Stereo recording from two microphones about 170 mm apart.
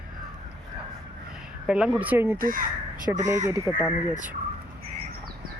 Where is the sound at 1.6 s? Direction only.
5° right (ahead or behind).